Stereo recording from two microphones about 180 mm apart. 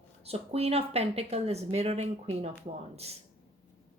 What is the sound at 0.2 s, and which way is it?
Speech, 35° right (ahead or behind).